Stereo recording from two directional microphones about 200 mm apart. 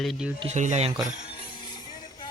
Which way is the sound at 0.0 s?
Centre (ahead or behind).